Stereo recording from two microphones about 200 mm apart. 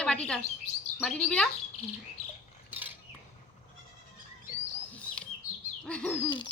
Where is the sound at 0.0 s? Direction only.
5° left (ahead or behind).